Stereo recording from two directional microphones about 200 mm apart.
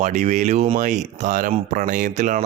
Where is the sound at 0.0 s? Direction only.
35° right (ahead or behind).